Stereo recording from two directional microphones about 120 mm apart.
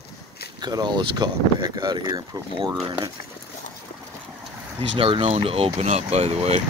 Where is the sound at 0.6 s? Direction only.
35° right (ahead or behind).